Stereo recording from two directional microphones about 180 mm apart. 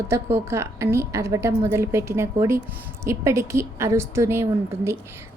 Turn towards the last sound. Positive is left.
turn(degrees=-15)  # may be behind; listen again after turning